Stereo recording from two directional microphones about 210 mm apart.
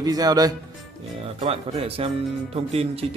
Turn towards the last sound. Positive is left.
turn(degrees=-30)  # may be behind; listen again after turning